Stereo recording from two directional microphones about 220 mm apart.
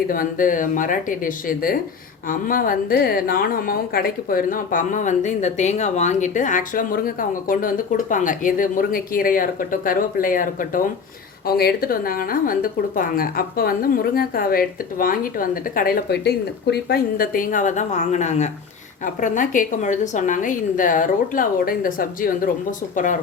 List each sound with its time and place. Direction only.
0.1 s a woman's voice: 40° left (ahead or behind)